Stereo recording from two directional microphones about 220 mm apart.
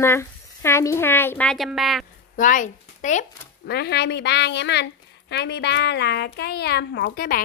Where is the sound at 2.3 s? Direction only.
35° left (ahead or behind).